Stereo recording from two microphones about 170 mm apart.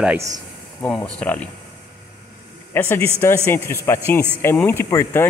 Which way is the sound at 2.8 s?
15° left (ahead or behind).